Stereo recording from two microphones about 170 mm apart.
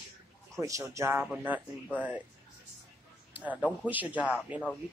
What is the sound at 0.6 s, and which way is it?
A man's voice, 20° right (ahead or behind).